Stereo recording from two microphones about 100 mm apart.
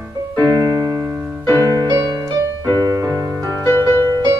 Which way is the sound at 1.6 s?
35° right (ahead or behind).